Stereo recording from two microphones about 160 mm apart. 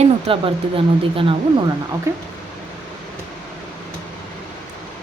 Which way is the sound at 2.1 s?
15° right (ahead or behind).